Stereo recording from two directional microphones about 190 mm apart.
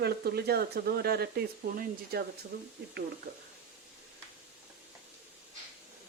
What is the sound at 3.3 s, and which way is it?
Speech, 45° right (ahead or behind).